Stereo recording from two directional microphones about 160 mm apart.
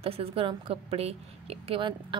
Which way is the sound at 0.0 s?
35° right (ahead or behind).